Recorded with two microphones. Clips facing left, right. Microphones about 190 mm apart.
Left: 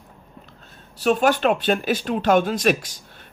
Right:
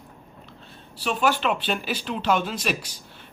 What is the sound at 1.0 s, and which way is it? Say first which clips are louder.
Speech: left 5 dB; 45° left (ahead or behind).